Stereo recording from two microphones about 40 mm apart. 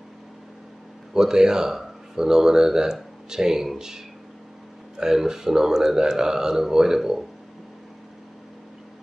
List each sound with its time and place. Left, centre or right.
1.1 s speech: centre